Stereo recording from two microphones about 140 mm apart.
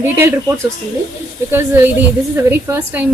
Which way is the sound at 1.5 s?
15° right (ahead or behind).